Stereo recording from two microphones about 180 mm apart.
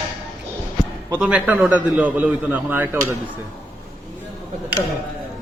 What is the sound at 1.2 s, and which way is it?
Speech, 10° right (ahead or behind).